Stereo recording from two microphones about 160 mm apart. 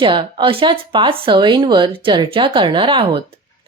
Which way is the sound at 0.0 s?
30° right (ahead or behind).